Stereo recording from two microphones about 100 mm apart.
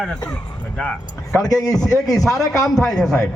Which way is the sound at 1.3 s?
35° left (ahead or behind).